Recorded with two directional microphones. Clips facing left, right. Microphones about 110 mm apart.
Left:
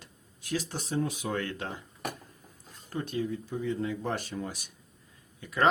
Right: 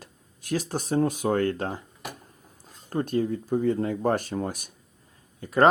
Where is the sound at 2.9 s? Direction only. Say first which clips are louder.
Right 7 dB; 45° right (ahead or behind).